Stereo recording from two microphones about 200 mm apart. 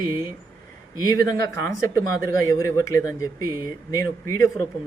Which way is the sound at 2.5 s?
15° left (ahead or behind).